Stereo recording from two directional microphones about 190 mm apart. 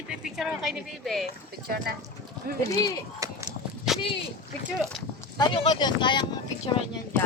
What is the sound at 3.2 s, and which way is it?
Walk, 15° right (ahead or behind).